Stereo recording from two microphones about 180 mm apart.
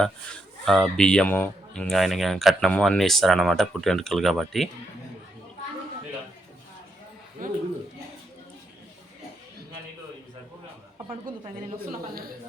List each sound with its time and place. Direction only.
0.6 s speech: centre (ahead or behind)
7.4 s a sound: 50° right (ahead or behind)
11.3 s speech: 50° right (ahead or behind)